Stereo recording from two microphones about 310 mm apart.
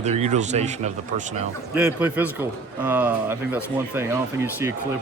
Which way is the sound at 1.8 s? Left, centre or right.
Centre.